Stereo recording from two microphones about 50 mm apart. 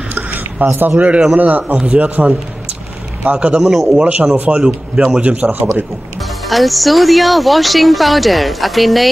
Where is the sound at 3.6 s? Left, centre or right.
Centre.